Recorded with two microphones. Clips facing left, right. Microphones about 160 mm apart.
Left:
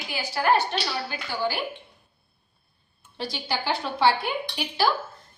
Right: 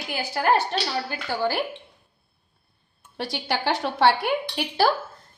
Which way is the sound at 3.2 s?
80° right.